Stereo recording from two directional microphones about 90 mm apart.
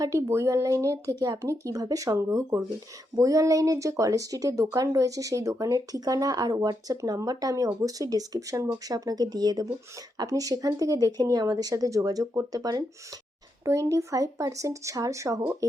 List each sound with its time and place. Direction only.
0.0 s speech: 35° right (ahead or behind)